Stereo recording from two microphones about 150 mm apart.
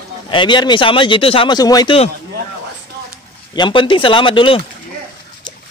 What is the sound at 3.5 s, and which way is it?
Speech, 35° left (ahead or behind).